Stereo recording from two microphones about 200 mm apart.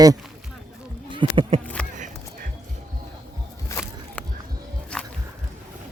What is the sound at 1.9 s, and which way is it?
Music, 40° right (ahead or behind).